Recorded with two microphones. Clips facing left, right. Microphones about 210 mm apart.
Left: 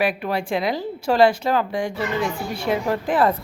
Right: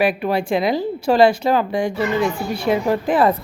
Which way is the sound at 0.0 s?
15° right (ahead or behind).